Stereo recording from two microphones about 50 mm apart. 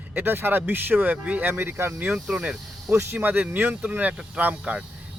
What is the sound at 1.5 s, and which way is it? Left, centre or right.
Speech, right.